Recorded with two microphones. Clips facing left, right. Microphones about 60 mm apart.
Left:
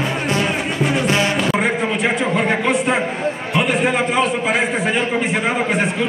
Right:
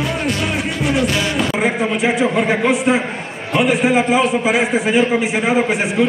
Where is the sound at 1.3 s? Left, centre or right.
Centre.